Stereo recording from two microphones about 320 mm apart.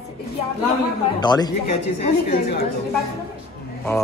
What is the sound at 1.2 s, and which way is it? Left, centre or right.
Speech, centre.